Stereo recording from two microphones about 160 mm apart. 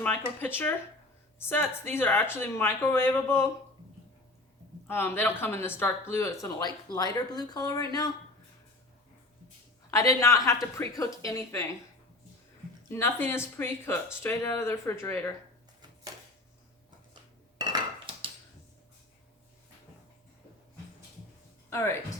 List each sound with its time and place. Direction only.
0.0 s speech: 10° left (ahead or behind)
4.9 s speech: 15° left (ahead or behind)
9.9 s speech: 20° left (ahead or behind)
12.9 s speech: 15° left (ahead or behind)
17.6 s cutlery: 30° right (ahead or behind)
21.7 s speech: 15° left (ahead or behind)